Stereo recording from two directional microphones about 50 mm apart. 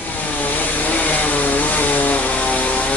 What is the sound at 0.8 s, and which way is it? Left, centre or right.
Chainsaw, left.